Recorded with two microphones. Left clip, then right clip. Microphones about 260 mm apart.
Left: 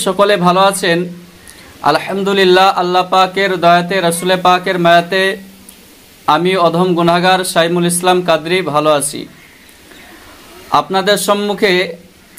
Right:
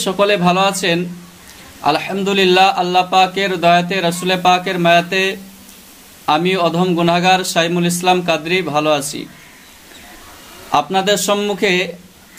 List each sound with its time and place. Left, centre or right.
0.0 s a man's voice: centre
10.7 s a man's voice: centre